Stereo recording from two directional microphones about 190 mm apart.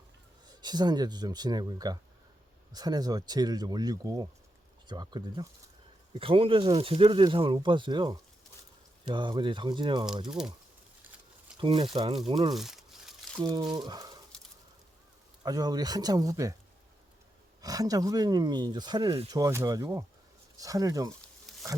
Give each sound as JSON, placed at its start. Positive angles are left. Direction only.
{"t": 0.6, "sound": "speech", "side_deg": -20}
{"t": 10.2, "sound": "speech", "side_deg": -5}
{"t": 11.5, "sound": "speech", "side_deg": -25}
{"t": 12.5, "sound": "crumpling", "side_deg": 0}
{"t": 13.4, "sound": "speech", "side_deg": -20}
{"t": 15.4, "sound": "speech", "side_deg": -20}
{"t": 17.6, "sound": "speech", "side_deg": -20}